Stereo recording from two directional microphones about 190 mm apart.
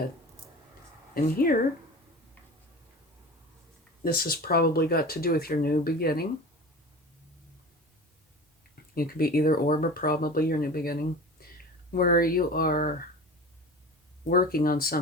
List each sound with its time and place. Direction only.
1.1 s speech: 50° left (ahead or behind)
4.0 s speech: 50° left (ahead or behind)
9.0 s speech: 50° left (ahead or behind)
14.3 s speech: 50° left (ahead or behind)